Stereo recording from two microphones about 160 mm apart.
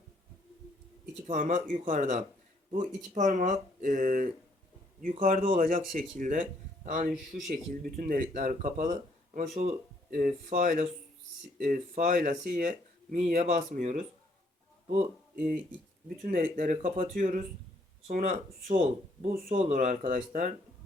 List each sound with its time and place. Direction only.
1.3 s speech: 50° right (ahead or behind)
7.1 s speech: 5° right (ahead or behind)
7.5 s speech: 60° right (ahead or behind)
16.0 s speech: 55° right (ahead or behind)
19.2 s speech: 65° right (ahead or behind)
19.5 s speech: 45° right (ahead or behind)